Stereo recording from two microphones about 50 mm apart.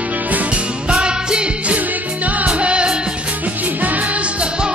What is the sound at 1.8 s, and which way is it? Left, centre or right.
Music, right.